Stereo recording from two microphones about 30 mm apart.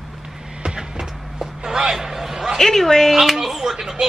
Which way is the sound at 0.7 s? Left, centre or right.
Right.